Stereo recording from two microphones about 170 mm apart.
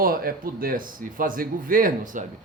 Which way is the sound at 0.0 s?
60° right (ahead or behind).